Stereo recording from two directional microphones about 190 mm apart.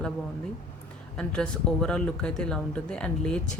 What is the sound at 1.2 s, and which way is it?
Speech, 5° left (ahead or behind).